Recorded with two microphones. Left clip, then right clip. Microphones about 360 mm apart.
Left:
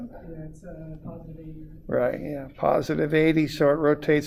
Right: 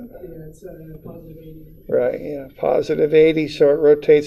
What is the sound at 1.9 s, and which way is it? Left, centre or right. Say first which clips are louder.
Speech: right 6 dB; left.